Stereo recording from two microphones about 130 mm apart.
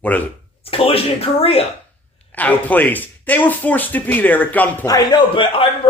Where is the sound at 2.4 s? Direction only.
10° left (ahead or behind).